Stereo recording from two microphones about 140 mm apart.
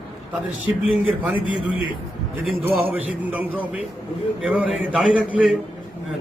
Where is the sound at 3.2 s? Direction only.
10° right (ahead or behind).